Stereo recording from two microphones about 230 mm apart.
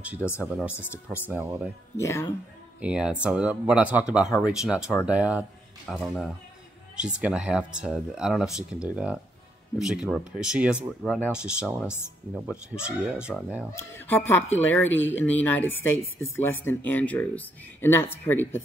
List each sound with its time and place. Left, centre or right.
0.2 s speech: centre
0.9 s speech: centre
2.0 s speech: centre
2.8 s speech: centre
13.7 s speech: centre
14.9 s speech: left
15.1 s speech: centre